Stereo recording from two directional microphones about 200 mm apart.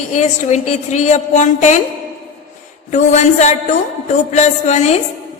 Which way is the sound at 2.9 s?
35° left (ahead or behind).